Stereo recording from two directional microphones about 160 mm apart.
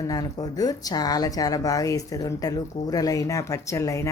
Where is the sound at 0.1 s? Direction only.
25° left (ahead or behind).